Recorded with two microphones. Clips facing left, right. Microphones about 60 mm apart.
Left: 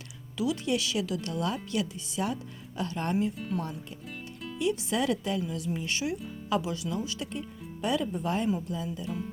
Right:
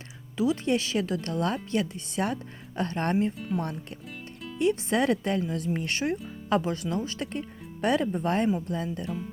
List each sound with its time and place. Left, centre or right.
0.3 s speech: right
4.5 s speech: right